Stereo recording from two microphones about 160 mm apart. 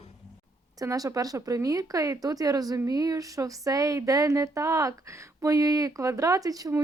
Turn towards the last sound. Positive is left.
turn(degrees=-20)  # may be behind; listen again after turning